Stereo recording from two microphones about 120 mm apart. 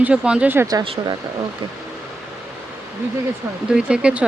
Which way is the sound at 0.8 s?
45° right (ahead or behind).